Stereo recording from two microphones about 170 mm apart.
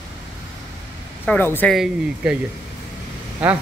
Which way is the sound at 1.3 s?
10° left (ahead or behind).